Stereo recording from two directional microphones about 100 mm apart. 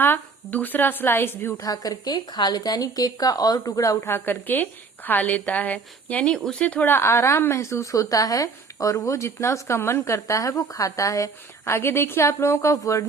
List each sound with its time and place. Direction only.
0.0 s speech: 20° left (ahead or behind)
1.5 s speech: 35° left (ahead or behind)